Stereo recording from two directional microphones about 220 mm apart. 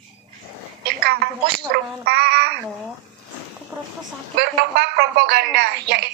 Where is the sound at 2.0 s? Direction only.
45° right (ahead or behind).